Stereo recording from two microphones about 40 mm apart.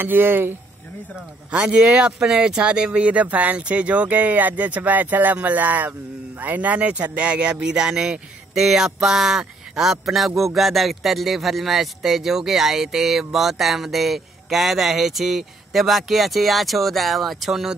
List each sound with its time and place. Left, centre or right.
0.0 s speech: right
1.5 s speech: right
2.1 s speech: centre